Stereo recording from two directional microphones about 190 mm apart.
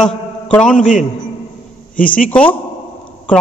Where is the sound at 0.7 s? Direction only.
40° left (ahead or behind).